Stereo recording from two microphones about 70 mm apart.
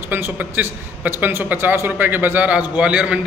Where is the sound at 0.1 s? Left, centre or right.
Right.